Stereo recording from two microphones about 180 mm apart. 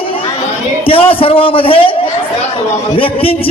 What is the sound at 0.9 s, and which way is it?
Speech, 30° left (ahead or behind).